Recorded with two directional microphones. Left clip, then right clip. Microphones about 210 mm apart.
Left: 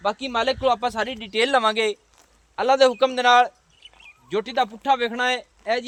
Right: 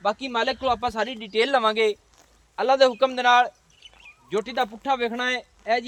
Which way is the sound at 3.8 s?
5° right (ahead or behind).